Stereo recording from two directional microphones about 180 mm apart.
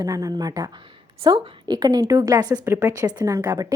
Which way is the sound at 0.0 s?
20° right (ahead or behind).